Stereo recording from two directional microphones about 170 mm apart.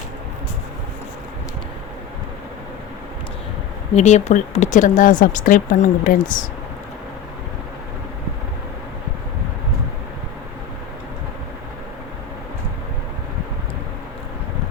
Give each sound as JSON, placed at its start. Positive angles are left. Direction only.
{"t": 3.9, "sound": "speech", "side_deg": 40}